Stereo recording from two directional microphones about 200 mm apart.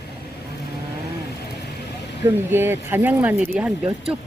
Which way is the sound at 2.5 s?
10° right (ahead or behind).